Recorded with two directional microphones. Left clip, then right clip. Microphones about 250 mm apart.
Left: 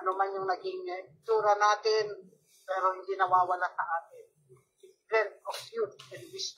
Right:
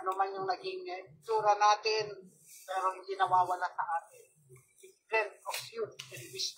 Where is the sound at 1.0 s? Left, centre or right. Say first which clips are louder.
Left 4 dB; right.